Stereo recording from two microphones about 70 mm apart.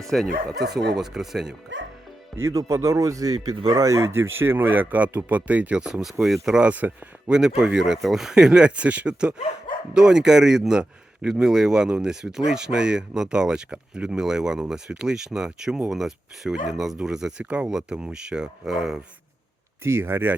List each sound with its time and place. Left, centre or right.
0.0 s speech: centre
2.5 s speech: right
5.8 s speech: centre
6.7 s speech: right
7.3 s speech: centre
19.8 s speech: right